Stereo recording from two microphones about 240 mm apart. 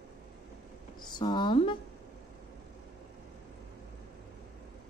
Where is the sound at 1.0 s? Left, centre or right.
Centre.